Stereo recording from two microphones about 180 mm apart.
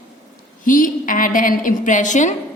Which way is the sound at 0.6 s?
50° left (ahead or behind).